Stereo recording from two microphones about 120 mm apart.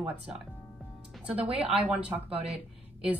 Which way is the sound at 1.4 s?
55° right (ahead or behind).